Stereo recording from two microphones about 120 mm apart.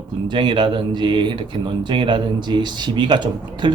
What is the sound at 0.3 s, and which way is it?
Speech, 40° right (ahead or behind).